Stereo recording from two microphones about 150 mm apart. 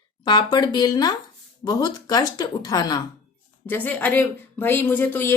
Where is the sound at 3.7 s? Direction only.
10° left (ahead or behind).